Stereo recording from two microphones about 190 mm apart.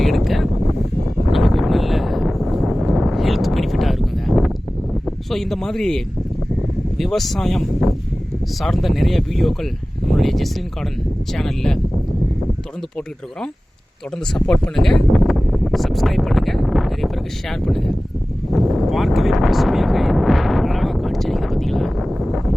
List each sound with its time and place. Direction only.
0.0 s wind noise: centre (ahead or behind)
1.3 s a sound: centre (ahead or behind)
5.0 s speech: centre (ahead or behind)
14.3 s speech: 5° left (ahead or behind)
18.5 s wind noise: centre (ahead or behind)